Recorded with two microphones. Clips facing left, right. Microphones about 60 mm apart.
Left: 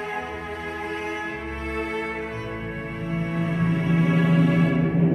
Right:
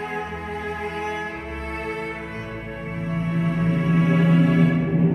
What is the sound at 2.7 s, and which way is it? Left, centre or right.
Music, left.